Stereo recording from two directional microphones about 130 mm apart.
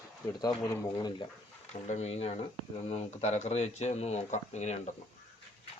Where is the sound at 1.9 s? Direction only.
55° left (ahead or behind).